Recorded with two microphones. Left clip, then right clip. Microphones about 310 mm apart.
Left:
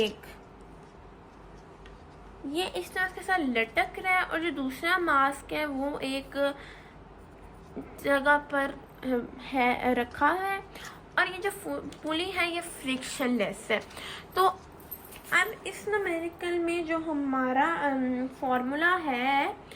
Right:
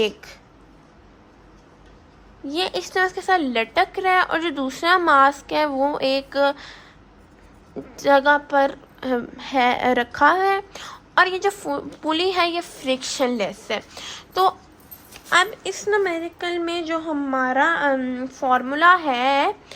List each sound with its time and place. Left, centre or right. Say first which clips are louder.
0.0 s speech: right 7 dB; centre
2.5 s a woman's voice: right 8 dB; centre
8.0 s a woman's voice: right 8 dB; centre